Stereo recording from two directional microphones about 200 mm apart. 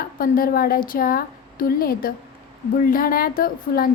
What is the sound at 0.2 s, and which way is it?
A woman's voice, 45° left (ahead or behind).